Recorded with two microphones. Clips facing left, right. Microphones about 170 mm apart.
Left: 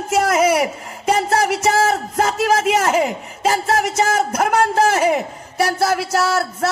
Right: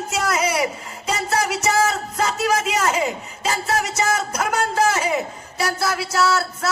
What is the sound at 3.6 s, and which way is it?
A man's voice, 50° left (ahead or behind).